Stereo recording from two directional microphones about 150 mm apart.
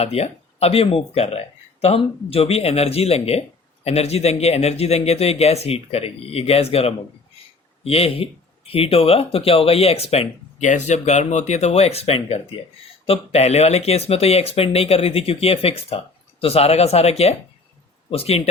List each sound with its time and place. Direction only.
0.0 s speech: 45° left (ahead or behind)